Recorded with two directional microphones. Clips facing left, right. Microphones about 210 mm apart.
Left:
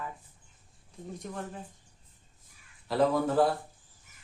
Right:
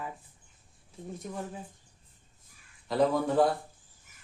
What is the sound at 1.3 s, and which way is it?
Speech, 5° right (ahead or behind).